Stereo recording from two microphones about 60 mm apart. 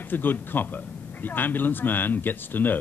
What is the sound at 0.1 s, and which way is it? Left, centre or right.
Speech, left.